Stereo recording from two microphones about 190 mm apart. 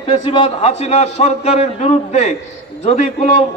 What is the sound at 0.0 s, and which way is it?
A man's voice, 30° left (ahead or behind).